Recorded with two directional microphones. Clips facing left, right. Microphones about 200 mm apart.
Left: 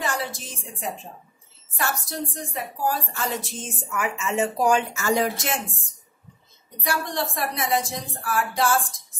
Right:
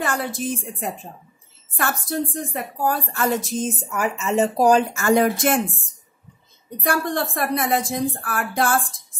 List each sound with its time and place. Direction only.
0.0 s a woman's voice: 55° right (ahead or behind); by 4.8 s 35° right (ahead or behind)
4.9 s a woman's voice: 55° right (ahead or behind)
6.8 s a woman's voice: 55° right (ahead or behind)